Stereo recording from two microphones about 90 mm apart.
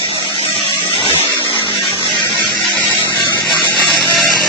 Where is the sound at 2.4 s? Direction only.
Centre (ahead or behind).